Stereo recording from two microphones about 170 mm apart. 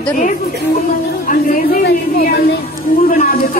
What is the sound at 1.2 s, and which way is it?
A woman's voice, 60° left (ahead or behind).